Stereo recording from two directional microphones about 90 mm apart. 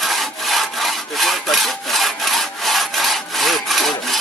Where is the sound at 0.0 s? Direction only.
Centre (ahead or behind).